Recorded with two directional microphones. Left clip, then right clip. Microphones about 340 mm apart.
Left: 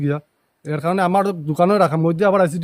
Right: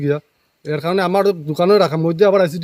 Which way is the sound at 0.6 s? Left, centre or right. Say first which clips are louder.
Right 1 dB; centre.